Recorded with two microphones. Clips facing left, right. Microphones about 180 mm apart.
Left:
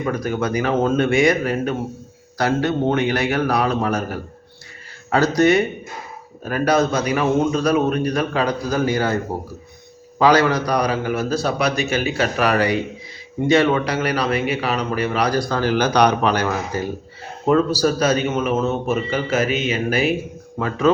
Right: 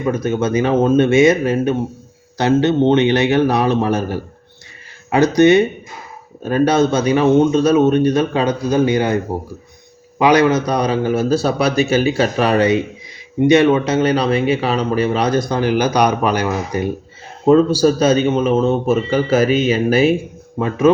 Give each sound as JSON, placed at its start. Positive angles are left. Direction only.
{"t": 0.0, "sound": "speech", "side_deg": -25}
{"t": 5.4, "sound": "speech", "side_deg": -20}
{"t": 10.2, "sound": "speech", "side_deg": -20}
{"t": 17.4, "sound": "a man's voice", "side_deg": -25}
{"t": 20.6, "sound": "speech", "side_deg": -20}